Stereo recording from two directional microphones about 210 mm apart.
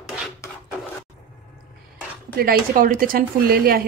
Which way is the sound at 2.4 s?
45° right (ahead or behind).